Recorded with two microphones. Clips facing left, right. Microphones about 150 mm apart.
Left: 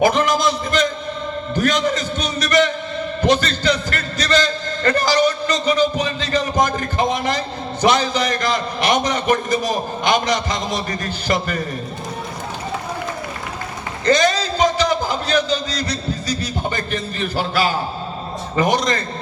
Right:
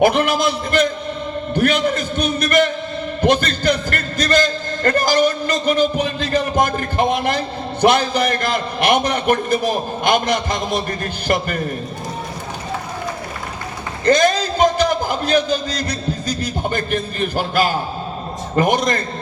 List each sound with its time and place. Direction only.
0.0 s a sound: 60° right (ahead or behind)
3.2 s a man's voice: 55° right (ahead or behind)
14.0 s a man's voice: 55° right (ahead or behind)